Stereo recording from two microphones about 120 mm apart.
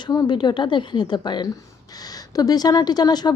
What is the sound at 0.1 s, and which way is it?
A woman's voice, 35° left (ahead or behind).